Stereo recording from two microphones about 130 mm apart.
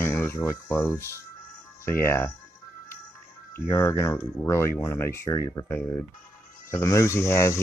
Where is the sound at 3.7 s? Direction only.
20° left (ahead or behind).